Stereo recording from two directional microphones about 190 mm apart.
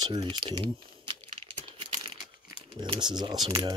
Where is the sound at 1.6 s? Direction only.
30° right (ahead or behind).